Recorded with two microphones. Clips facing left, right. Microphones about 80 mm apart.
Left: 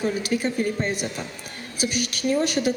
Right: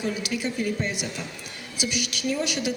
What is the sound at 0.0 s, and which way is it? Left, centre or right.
A woman's voice, left.